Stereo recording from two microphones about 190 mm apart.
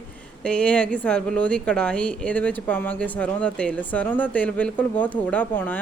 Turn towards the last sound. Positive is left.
turn(degrees=10)  # may be behind; listen again after turning